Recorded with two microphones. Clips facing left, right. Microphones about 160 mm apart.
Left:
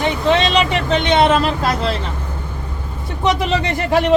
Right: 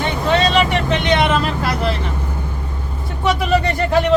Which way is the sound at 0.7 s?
25° left (ahead or behind).